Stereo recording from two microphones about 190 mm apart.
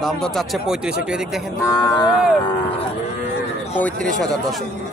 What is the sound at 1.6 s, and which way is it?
Speech, 20° left (ahead or behind).